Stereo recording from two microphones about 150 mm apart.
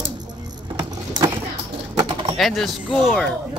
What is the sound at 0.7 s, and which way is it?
Keys jangling, 25° right (ahead or behind).